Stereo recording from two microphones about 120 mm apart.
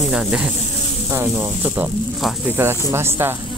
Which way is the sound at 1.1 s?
20° right (ahead or behind).